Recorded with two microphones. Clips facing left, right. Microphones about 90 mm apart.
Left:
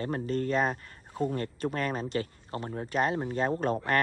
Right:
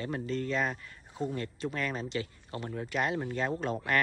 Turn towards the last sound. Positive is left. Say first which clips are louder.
# left 4 dB
turn(degrees=45)  # may be behind; listen again after turning